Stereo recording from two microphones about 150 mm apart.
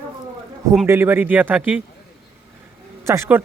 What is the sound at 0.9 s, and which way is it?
Speech, 15° right (ahead or behind).